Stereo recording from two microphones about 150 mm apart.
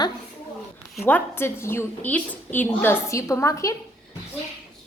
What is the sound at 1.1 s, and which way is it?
A woman's voice, 15° left (ahead or behind).